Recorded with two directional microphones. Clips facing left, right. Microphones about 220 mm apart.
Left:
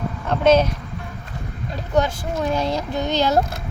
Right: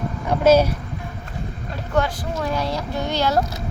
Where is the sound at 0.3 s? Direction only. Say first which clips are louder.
Right 1 dB; 10° right (ahead or behind).